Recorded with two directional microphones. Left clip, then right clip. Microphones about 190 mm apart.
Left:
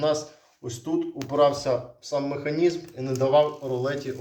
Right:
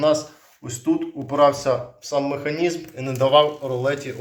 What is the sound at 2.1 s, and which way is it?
A man's voice, 10° right (ahead or behind).